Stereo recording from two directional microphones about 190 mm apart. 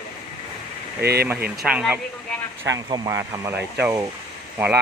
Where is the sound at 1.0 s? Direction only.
55° right (ahead or behind).